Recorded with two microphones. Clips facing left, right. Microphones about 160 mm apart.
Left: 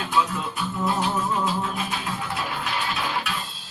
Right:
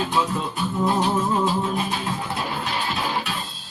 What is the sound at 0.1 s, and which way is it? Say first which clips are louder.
Music: right 1 dB; 35° right (ahead or behind).